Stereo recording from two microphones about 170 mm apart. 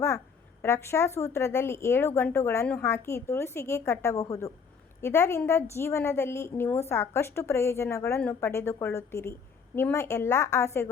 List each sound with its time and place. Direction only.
0.6 s a woman's voice: 15° left (ahead or behind)